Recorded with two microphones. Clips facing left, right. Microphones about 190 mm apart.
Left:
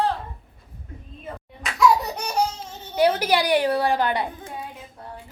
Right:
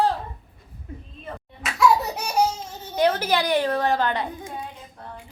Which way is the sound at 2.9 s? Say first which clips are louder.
Left 1 dB; 10° left (ahead or behind).